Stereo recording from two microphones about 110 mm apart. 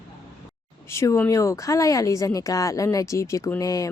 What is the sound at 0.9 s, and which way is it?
Speech, 25° left (ahead or behind).